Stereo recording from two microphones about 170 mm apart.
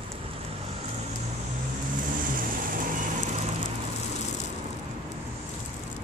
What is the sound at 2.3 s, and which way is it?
Vehicle, 55° right (ahead or behind).